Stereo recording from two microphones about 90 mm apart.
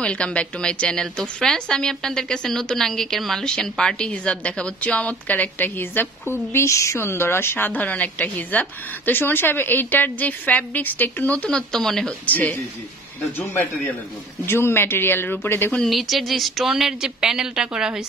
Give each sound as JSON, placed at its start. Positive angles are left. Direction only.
{"t": 0.0, "sound": "a woman's voice", "side_deg": 10}
{"t": 6.5, "sound": "a woman's voice", "side_deg": 35}
{"t": 12.3, "sound": "a woman's voice", "side_deg": 15}
{"t": 15.7, "sound": "speech", "side_deg": 5}